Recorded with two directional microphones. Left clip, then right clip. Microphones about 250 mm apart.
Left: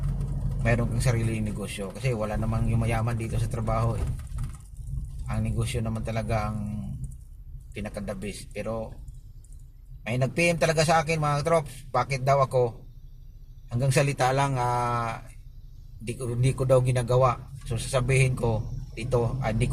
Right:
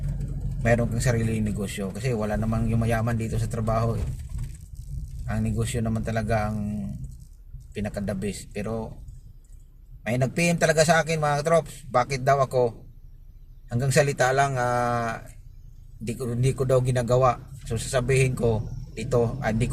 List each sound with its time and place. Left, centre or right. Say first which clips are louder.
0.9 s speech: right 3 dB; centre
5.3 s speech: right 3 dB; centre
7.7 s speech: right 4 dB; centre
10.1 s speech: even; centre
13.7 s speech: right 3 dB; centre